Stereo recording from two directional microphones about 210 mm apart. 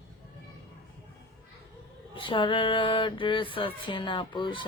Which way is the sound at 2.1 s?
25° left (ahead or behind).